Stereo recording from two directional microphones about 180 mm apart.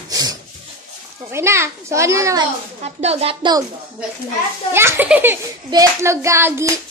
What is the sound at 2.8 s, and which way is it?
Speech, 35° right (ahead or behind).